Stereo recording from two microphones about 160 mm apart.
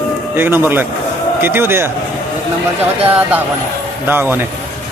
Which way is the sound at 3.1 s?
10° right (ahead or behind).